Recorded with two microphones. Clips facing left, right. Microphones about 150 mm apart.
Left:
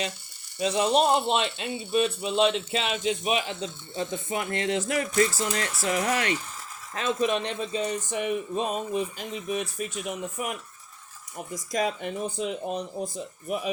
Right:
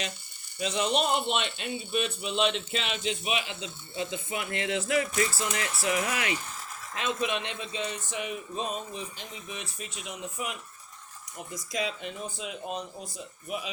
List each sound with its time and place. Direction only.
0.6 s speech: 30° left (ahead or behind); by 12.5 s 50° left (ahead or behind)